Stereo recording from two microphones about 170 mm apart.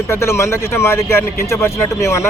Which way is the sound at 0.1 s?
15° left (ahead or behind).